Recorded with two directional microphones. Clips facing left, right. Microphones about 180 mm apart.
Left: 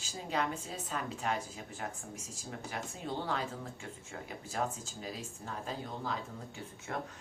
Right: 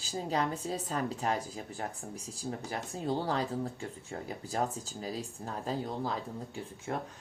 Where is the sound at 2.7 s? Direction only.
35° right (ahead or behind).